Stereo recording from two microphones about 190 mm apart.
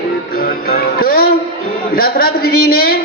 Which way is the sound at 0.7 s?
50° left (ahead or behind).